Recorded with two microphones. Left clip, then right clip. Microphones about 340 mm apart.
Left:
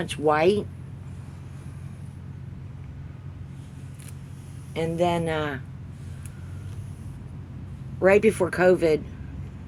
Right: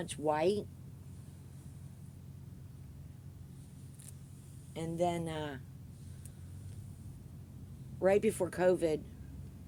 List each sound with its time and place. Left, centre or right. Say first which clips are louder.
0.0 s speech: left 11 dB; right
4.7 s speech: left 11 dB; right
8.0 s speech: left 11 dB; right